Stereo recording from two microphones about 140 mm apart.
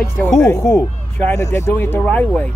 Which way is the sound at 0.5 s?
20° left (ahead or behind).